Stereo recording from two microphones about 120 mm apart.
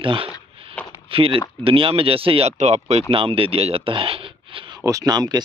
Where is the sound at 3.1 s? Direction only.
50° right (ahead or behind).